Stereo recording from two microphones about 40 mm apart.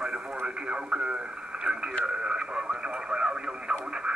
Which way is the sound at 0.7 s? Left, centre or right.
Right.